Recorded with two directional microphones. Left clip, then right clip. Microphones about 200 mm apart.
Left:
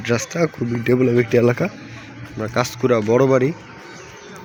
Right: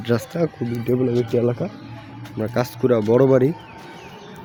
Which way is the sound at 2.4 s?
15° right (ahead or behind).